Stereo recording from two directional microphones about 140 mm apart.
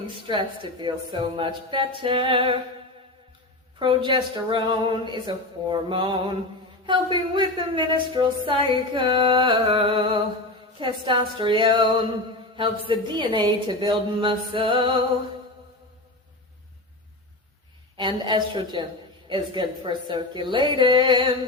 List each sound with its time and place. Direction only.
0.3 s speech: 35° right (ahead or behind)
3.8 s speech: 35° right (ahead or behind)
17.9 s speech: 30° right (ahead or behind)